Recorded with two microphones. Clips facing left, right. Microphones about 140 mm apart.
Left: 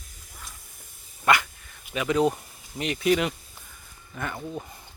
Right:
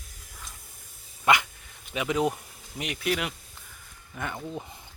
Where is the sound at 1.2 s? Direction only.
20° right (ahead or behind).